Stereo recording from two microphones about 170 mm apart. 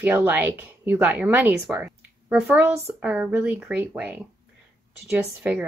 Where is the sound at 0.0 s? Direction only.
10° right (ahead or behind).